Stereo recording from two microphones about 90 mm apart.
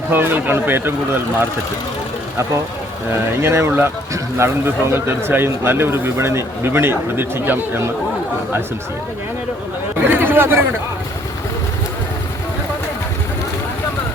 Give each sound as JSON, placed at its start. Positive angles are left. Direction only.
{"t": 0.1, "sound": "speech", "side_deg": -25}
{"t": 3.1, "sound": "speech", "side_deg": -30}
{"t": 10.0, "sound": "chatter", "side_deg": -25}